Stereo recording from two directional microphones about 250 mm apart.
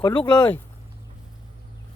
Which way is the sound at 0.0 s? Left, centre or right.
Centre.